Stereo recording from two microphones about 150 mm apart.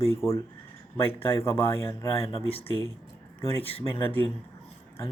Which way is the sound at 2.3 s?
40° left (ahead or behind).